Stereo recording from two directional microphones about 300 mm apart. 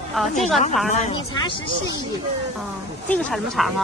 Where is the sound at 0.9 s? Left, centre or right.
Left.